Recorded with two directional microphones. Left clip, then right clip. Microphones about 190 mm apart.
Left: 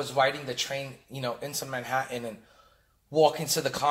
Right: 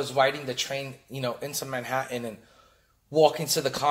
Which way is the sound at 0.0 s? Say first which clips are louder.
Right 2 dB; 25° right (ahead or behind).